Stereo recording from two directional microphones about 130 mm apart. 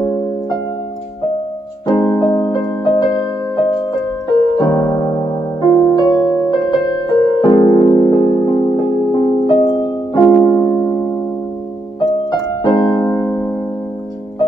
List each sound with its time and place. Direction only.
0.0 s music: 30° left (ahead or behind)
1.9 s music: 30° left (ahead or behind)
4.6 s piano: 30° left (ahead or behind)
7.1 s music: 30° left (ahead or behind)
12.3 s music: 30° left (ahead or behind)